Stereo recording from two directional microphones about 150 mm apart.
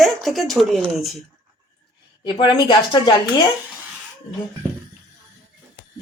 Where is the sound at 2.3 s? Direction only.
30° left (ahead or behind).